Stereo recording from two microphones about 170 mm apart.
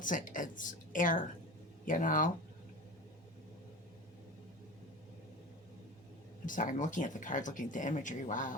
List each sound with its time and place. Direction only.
0.0 s speech: 50° left (ahead or behind)
6.4 s speech: 50° left (ahead or behind)